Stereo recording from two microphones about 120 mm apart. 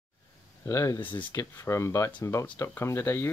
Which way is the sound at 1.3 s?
25° left (ahead or behind).